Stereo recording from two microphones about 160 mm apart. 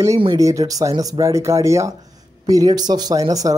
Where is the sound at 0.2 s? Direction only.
25° right (ahead or behind).